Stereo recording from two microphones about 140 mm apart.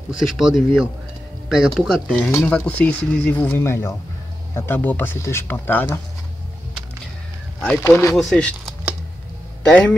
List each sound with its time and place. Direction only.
0.1 s speech: 5° right (ahead or behind); by 5.9 s 15° left (ahead or behind)
7.8 s speech: 20° left (ahead or behind)
8.2 s speech: 5° left (ahead or behind)